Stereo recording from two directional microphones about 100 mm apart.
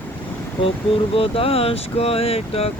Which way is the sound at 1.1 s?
70° left (ahead or behind).